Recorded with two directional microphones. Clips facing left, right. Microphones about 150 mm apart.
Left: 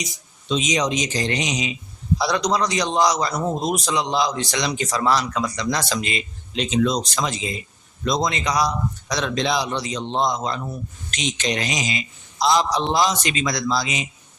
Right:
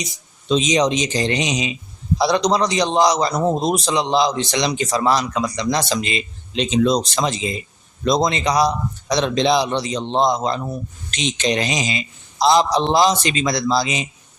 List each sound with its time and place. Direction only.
0.4 s a man's voice: 30° right (ahead or behind)